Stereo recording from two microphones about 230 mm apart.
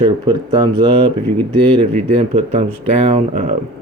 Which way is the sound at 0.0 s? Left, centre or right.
Centre.